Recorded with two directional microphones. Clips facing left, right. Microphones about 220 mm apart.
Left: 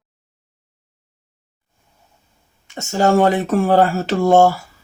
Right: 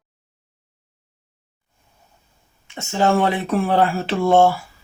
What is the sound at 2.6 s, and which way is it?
Speech, 45° left (ahead or behind).